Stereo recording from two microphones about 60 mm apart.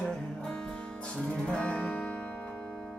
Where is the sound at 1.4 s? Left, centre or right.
Centre.